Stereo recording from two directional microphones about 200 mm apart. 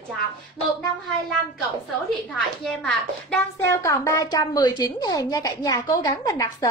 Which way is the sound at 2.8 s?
5° left (ahead or behind).